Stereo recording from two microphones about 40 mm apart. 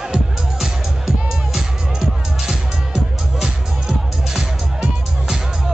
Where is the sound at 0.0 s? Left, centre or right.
Centre.